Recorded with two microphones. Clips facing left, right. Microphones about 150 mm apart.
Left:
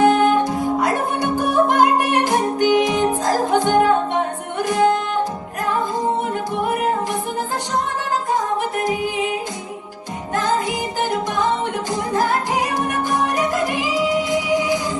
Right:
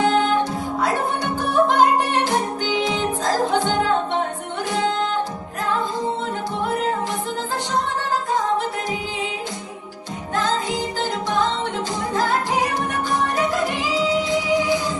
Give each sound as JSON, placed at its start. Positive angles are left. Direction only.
{"t": 0.0, "sound": "music", "side_deg": 15}
{"t": 10.3, "sound": "music", "side_deg": 15}